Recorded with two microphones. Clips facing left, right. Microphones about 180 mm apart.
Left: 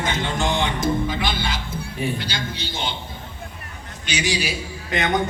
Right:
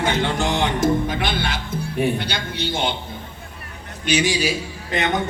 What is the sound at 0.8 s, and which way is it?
A man's voice, 55° right (ahead or behind).